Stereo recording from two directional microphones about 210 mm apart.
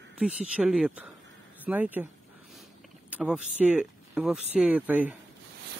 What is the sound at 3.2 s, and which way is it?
Speech, 5° right (ahead or behind).